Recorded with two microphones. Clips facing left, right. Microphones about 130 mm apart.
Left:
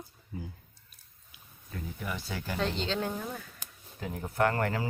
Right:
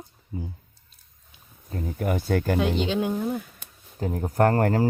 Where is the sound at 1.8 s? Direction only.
50° right (ahead or behind).